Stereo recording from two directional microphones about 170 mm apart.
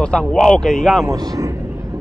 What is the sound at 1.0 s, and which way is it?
Speech, 20° right (ahead or behind).